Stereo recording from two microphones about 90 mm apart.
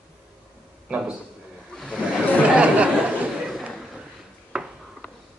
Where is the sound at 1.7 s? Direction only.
Centre (ahead or behind).